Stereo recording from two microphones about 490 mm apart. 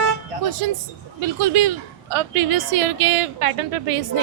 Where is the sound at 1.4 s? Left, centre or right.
Right.